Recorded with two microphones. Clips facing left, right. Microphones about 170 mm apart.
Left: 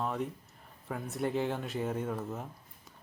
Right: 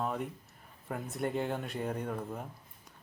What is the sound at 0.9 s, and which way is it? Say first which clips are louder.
Speech: left 1 dB; centre (ahead or behind).